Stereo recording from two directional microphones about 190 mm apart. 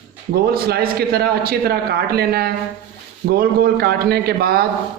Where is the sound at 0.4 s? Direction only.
50° right (ahead or behind).